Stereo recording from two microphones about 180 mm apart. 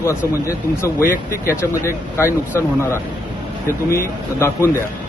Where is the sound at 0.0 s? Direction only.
15° left (ahead or behind).